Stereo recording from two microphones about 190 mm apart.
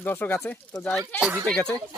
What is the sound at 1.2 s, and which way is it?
Speech, 15° right (ahead or behind).